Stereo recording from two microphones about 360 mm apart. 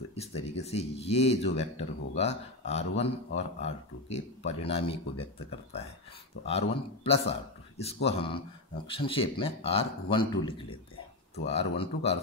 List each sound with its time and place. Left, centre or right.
0.1 s speech: centre